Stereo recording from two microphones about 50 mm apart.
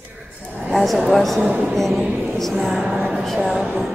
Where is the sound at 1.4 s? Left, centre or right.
Right.